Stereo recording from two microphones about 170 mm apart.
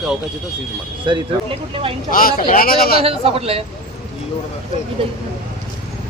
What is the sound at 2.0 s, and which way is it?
Speech, 55° left (ahead or behind).